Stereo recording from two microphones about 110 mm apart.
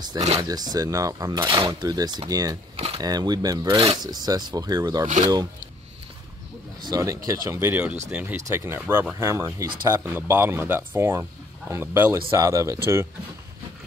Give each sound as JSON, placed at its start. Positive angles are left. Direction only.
{"t": 0.4, "sound": "speech", "side_deg": -35}
{"t": 2.7, "sound": "a sound", "side_deg": -60}
{"t": 3.0, "sound": "speech", "side_deg": -35}
{"t": 6.8, "sound": "speech", "side_deg": -35}